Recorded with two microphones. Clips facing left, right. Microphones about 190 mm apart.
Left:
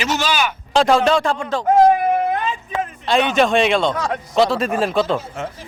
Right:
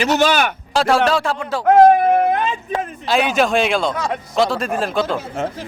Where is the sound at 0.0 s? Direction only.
55° right (ahead or behind).